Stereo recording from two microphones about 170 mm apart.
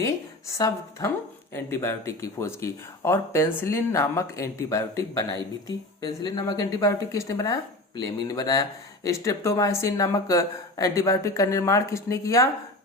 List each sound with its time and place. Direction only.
0.0 s speech: 15° left (ahead or behind)